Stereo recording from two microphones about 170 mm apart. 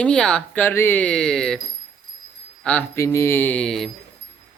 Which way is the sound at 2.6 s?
10° left (ahead or behind).